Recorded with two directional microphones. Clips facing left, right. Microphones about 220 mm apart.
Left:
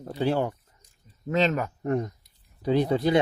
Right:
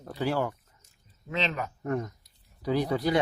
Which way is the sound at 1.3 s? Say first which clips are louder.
Left 7 dB; 45° left (ahead or behind).